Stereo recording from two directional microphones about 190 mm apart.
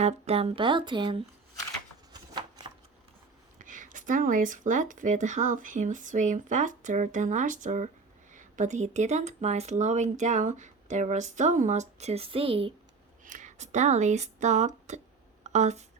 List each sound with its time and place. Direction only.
0.0 s speech: 35° right (ahead or behind)
3.6 s speech: 45° right (ahead or behind)
13.2 s speech: 40° right (ahead or behind)